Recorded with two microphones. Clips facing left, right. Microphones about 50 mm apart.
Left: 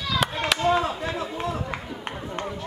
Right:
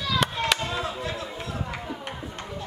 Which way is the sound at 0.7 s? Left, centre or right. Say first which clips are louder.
Left 7 dB; centre.